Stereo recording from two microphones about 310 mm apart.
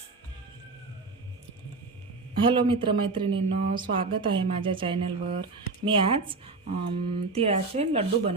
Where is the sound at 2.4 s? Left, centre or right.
Centre.